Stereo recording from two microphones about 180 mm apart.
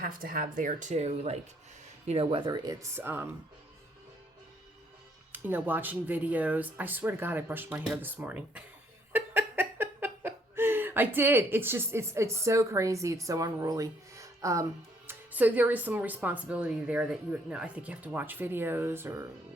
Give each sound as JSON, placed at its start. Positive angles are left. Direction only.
{"t": 0.0, "sound": "speech", "side_deg": -55}
{"t": 2.5, "sound": "speech", "side_deg": -20}
{"t": 5.3, "sound": "speech", "side_deg": -10}